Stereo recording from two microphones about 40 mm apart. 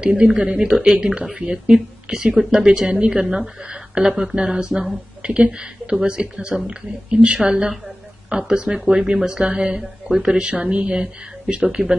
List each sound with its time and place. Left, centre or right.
0.0 s speech: right
0.6 s speech: centre
10.5 s speech: right